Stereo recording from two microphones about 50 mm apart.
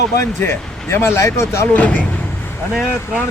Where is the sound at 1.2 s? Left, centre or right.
Left.